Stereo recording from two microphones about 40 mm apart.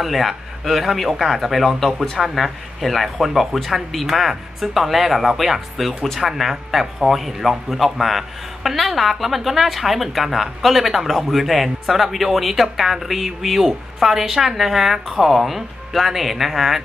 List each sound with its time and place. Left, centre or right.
0.0 s speech: centre